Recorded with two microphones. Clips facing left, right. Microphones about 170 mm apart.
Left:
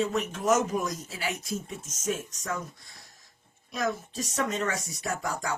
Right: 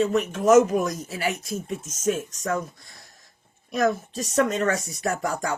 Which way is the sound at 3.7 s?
60° right (ahead or behind).